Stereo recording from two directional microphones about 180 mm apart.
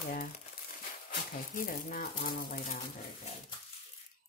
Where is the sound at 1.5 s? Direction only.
50° left (ahead or behind).